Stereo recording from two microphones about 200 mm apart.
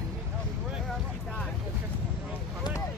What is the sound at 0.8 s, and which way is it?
Boat, 5° left (ahead or behind).